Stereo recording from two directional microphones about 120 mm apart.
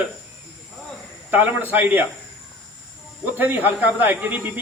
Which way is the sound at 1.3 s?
15° right (ahead or behind).